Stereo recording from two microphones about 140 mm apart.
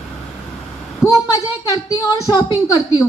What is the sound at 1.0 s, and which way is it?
A woman's voice, 25° left (ahead or behind).